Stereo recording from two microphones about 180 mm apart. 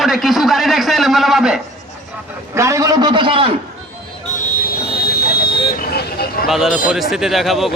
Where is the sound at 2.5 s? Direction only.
15° right (ahead or behind).